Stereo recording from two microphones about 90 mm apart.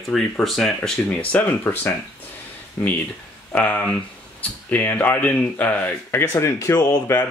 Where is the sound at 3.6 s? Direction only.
15° left (ahead or behind); by 7.0 s 40° left (ahead or behind).